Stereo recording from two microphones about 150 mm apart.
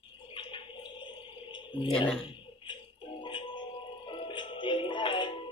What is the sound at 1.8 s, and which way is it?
Speech, 35° left (ahead or behind).